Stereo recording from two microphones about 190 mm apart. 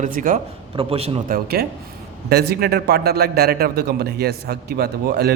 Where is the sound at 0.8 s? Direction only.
30° right (ahead or behind).